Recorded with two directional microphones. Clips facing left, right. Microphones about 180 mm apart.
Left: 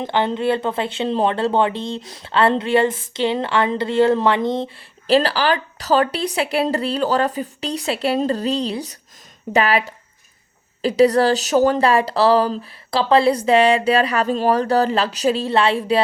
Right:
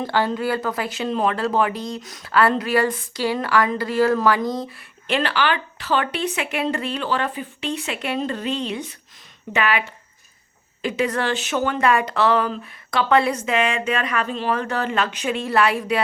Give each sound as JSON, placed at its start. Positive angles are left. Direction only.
{"t": 0.0, "sound": "speech", "side_deg": 20}